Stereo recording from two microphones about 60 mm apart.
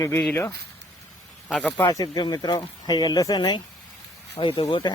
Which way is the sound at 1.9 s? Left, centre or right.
Left.